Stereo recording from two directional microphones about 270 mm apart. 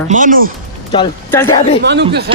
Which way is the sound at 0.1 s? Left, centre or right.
Right.